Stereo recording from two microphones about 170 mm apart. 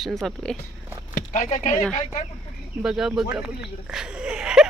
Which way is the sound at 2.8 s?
5° right (ahead or behind).